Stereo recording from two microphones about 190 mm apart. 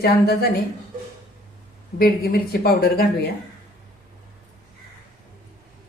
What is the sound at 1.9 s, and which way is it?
Speech, 50° left (ahead or behind).